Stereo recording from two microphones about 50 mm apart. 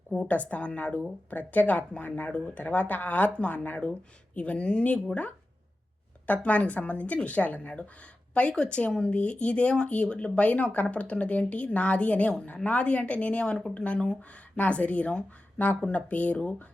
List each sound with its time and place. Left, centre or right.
0.3 s speech: left
6.2 s speech: left